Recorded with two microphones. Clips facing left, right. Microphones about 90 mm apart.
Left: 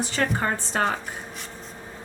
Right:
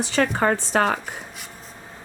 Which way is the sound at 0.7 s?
90° right.